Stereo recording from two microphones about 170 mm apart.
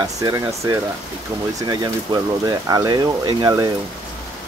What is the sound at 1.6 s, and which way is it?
Speech, 20° right (ahead or behind).